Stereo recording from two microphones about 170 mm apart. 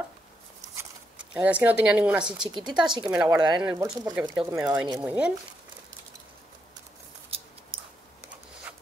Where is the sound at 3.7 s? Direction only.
20° right (ahead or behind).